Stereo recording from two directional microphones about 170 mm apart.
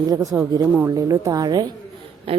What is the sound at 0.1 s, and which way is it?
A woman's voice, 20° right (ahead or behind).